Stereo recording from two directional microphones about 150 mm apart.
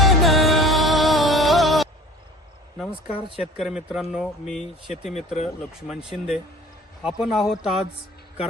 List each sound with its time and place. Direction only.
0.0 s music: centre (ahead or behind)
2.7 s speech: centre (ahead or behind)
5.1 s speech: 45° left (ahead or behind)
6.1 s speech: 5° right (ahead or behind)